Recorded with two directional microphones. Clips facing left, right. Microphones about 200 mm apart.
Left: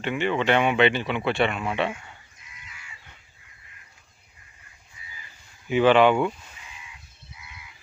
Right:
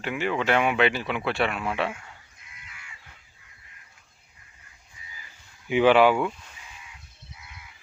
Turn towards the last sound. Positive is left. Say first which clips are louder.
# left 1 dB
turn(degrees=0)  # may be behind; listen again after turning